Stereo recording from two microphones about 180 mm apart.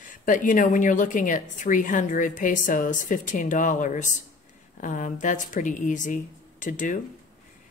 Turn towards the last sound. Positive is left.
turn(degrees=45)  # may be behind; listen again after turning